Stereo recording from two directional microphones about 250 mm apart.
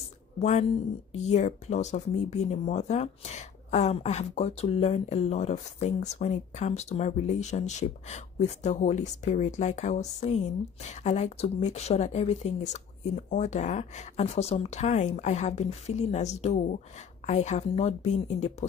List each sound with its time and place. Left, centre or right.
0.4 s speech: left